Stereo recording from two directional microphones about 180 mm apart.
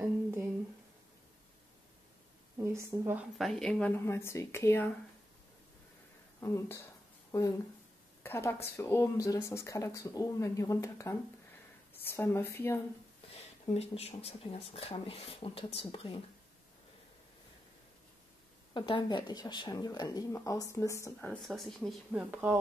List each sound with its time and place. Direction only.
2.6 s a woman's voice: 15° right (ahead or behind)
3.3 s speech: centre (ahead or behind)
6.4 s speech: 15° left (ahead or behind)
8.2 s speech: 15° left (ahead or behind)
13.7 s speech: 35° left (ahead or behind)
18.7 s speech: 25° left (ahead or behind)
21.2 s speech: 5° left (ahead or behind)
22.3 s a woman's voice: 10° right (ahead or behind)